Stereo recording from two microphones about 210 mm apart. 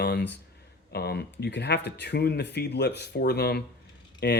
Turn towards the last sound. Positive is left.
turn(degrees=50)  # may be behind; listen again after turning